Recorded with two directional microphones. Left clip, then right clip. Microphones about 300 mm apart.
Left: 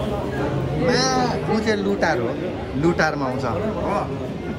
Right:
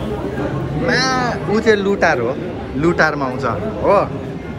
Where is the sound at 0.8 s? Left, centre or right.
Centre.